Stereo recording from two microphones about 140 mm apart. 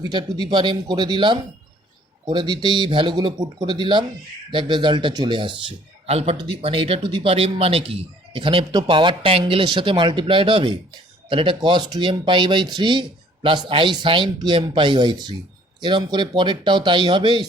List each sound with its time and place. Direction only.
0.0 s speech: 30° right (ahead or behind)
6.1 s speech: 45° right (ahead or behind)